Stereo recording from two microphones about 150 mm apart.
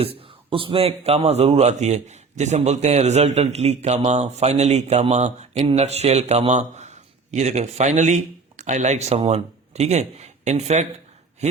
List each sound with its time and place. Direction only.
0.0 s speech: 40° right (ahead or behind)